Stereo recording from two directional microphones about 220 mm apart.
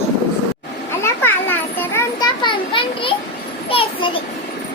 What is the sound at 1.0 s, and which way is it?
Children playing, 10° left (ahead or behind).